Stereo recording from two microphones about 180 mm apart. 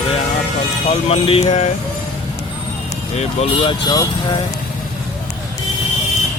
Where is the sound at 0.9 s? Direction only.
35° left (ahead or behind).